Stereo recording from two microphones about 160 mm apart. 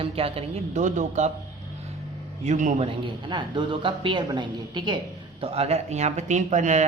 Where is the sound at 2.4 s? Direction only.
50° right (ahead or behind).